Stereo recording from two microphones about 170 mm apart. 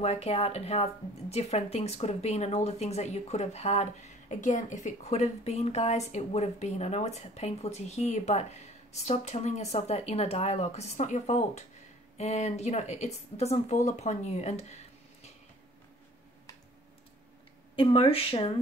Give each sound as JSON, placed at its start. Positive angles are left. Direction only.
{"t": 0.0, "sound": "speech", "side_deg": 40}
{"t": 17.7, "sound": "speech", "side_deg": 35}